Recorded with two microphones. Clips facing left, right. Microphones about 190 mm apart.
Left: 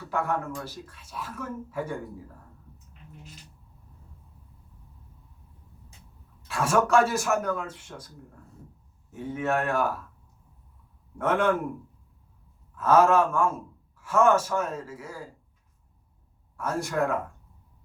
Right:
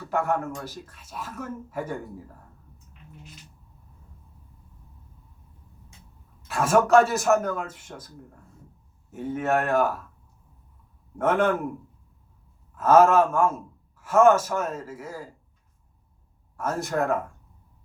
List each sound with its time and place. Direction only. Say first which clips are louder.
0.1 s speech: right 3 dB; 45° right (ahead or behind)
6.5 s speech: right 4 dB; 45° right (ahead or behind)
9.1 s speech: right 3 dB; 45° right (ahead or behind)
11.2 s speech: right 2 dB; 45° right (ahead or behind)
12.7 s speech: right 3 dB; 45° right (ahead or behind)
16.6 s speech: right 1 dB; 45° right (ahead or behind)